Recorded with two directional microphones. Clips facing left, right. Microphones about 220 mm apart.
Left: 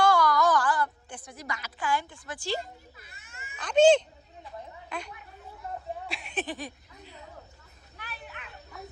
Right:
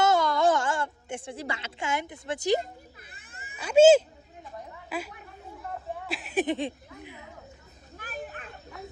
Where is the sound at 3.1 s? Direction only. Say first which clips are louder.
Right 2 dB; 50° right (ahead or behind).